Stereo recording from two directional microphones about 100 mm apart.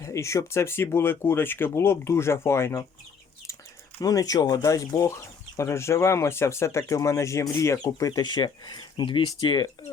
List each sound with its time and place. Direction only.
0.0 s speech: 30° left (ahead or behind)
4.0 s speech: 40° left (ahead or behind)